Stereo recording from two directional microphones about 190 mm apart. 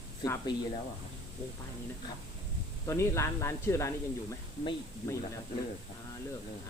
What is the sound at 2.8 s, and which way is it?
Speech, 15° left (ahead or behind).